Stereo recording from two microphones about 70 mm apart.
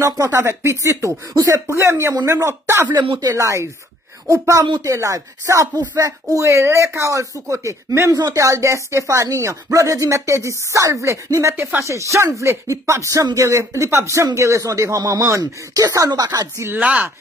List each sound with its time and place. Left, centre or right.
0.0 s speech: right
2.9 s speech: right
3.3 s speech: right
8.1 s speech: right
8.4 s speech: right
11.5 s speech: right
11.8 s speech: right
16.1 s a woman's voice: right
16.5 s speech: right
16.8 s speech: centre